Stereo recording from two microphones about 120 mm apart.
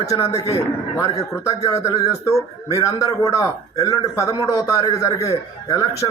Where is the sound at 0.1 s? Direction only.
30° left (ahead or behind).